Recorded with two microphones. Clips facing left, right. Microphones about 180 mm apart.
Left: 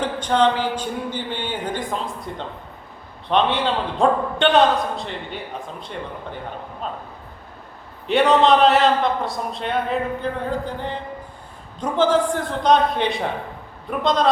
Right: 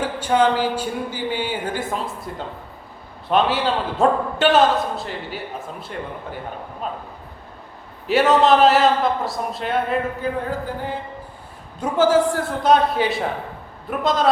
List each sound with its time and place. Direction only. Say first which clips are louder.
0.0 s a man's voice: even; 10° right (ahead or behind)
8.0 s a man's voice: even; 5° right (ahead or behind)